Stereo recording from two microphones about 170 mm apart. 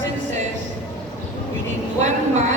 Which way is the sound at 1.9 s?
45° right (ahead or behind).